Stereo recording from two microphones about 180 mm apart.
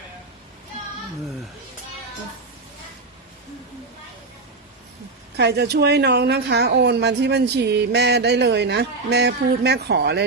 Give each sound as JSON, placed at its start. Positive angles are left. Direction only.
{"t": 5.4, "sound": "speech", "side_deg": -70}